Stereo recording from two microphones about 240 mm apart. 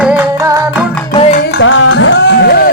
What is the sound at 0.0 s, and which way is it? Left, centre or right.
Music, centre.